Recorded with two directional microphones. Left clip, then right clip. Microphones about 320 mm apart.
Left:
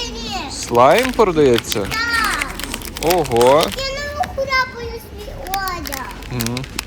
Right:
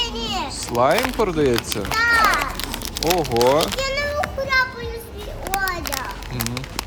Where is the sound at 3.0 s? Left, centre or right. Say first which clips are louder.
Left 4 dB; centre.